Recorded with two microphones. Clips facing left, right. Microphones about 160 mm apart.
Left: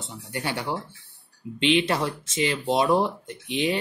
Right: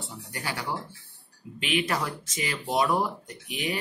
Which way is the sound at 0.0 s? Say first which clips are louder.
Left 5 dB; 25° left (ahead or behind).